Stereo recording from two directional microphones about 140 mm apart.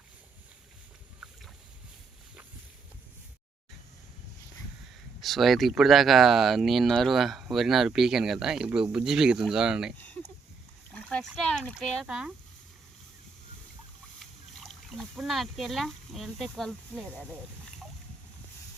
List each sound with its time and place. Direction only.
5.2 s speech: centre (ahead or behind)
10.9 s speech: 5° left (ahead or behind)
14.2 s speech: centre (ahead or behind)